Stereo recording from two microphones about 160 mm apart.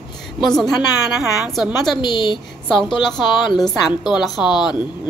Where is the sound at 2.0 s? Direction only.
30° left (ahead or behind).